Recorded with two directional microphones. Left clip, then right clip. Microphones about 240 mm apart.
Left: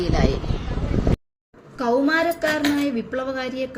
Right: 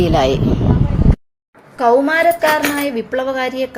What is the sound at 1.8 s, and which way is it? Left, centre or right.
Speech, centre.